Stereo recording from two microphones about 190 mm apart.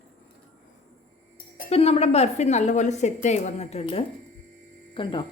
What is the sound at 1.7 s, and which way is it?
A woman's voice, 30° left (ahead or behind).